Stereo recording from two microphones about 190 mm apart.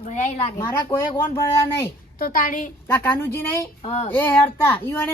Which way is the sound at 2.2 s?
45° left (ahead or behind).